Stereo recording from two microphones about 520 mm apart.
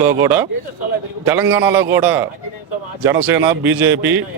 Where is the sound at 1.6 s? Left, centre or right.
Right.